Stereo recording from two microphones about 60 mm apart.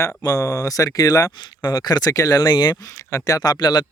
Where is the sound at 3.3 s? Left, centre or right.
Left.